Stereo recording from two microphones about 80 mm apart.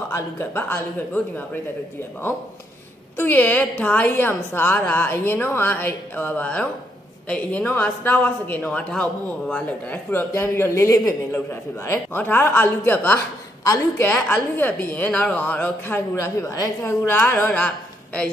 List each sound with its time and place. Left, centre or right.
0.1 s speech: left
3.2 s a man's voice: left
8.6 s a man's voice: centre
10.3 s speech: left
13.7 s speech: left
14.1 s a man's voice: centre
14.6 s speech: left
16.2 s speech: left
17.5 s speech: centre